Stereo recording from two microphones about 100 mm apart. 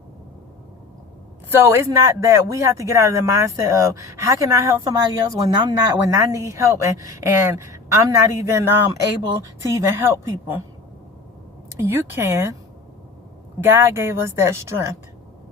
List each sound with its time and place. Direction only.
1.5 s speech: 25° right (ahead or behind)
11.8 s speech: 25° right (ahead or behind)
13.7 s speech: 25° right (ahead or behind)